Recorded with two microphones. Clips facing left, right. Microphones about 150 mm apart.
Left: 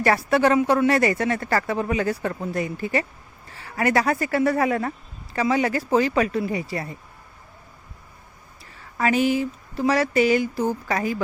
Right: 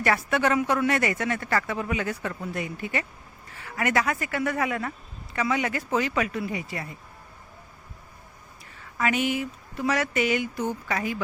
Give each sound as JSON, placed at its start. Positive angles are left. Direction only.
{"t": 0.0, "sound": "speech", "side_deg": 35}
{"t": 9.0, "sound": "speech", "side_deg": 35}